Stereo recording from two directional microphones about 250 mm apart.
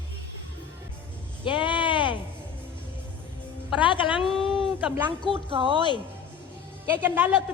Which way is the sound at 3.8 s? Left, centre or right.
Centre.